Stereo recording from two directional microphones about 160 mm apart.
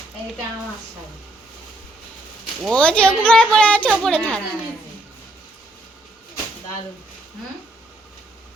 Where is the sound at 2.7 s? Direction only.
5° left (ahead or behind).